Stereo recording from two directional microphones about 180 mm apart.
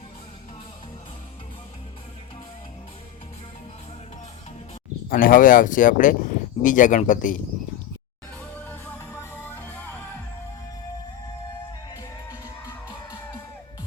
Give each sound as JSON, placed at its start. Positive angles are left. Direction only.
{"t": 5.0, "sound": "speech", "side_deg": 50}
{"t": 9.3, "sound": "music", "side_deg": 10}
{"t": 12.6, "sound": "music", "side_deg": 20}